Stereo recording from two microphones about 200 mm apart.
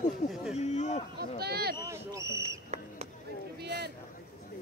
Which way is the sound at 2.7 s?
35° right (ahead or behind).